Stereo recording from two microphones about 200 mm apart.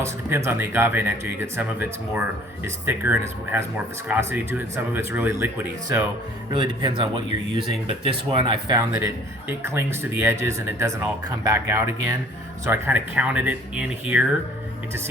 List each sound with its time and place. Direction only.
0.0 s speech: 15° right (ahead or behind)
6.5 s speech: 25° right (ahead or behind); by 14.3 s 5° right (ahead or behind)